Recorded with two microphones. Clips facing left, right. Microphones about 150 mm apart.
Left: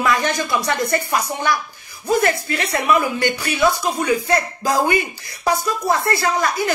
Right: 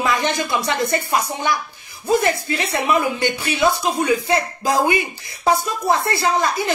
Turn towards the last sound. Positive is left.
turn(degrees=-25)  # may be behind; listen again after turning